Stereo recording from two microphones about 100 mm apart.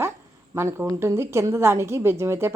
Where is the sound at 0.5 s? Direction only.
25° right (ahead or behind).